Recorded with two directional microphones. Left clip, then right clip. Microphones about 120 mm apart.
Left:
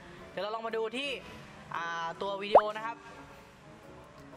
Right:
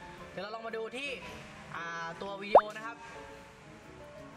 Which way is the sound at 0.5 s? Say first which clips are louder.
Left 5 dB; 30° left (ahead or behind).